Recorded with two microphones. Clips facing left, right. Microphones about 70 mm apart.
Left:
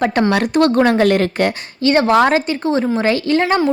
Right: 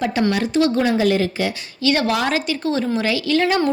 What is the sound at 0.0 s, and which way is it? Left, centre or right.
A woman's voice, left.